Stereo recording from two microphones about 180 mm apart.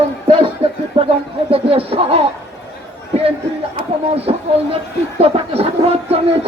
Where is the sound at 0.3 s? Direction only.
30° right (ahead or behind).